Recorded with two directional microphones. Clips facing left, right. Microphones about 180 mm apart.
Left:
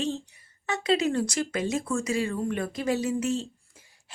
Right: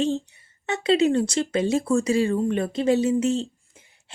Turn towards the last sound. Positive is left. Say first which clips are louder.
# right 2 dB
turn(degrees=-25)  # may be behind; listen again after turning